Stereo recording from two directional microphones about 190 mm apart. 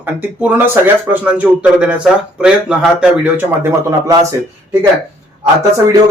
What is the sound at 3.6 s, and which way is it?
Speech, 15° right (ahead or behind).